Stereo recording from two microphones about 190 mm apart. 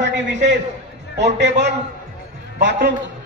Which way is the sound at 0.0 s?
70° right (ahead or behind).